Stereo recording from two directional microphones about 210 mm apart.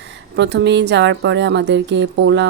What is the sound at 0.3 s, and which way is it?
A woman's voice, 55° right (ahead or behind).